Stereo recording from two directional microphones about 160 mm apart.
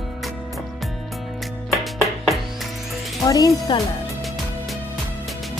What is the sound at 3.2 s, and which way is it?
Speech, 25° left (ahead or behind).